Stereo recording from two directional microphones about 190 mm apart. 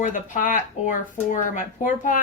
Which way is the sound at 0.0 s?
40° left (ahead or behind).